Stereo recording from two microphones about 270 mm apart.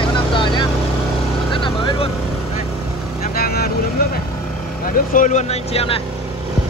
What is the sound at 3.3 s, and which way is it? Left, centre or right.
Vehicle, left.